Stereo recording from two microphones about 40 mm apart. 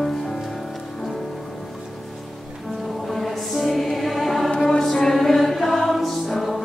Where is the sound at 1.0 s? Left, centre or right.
Centre.